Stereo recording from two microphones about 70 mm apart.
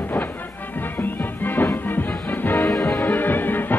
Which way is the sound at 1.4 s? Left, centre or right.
Left.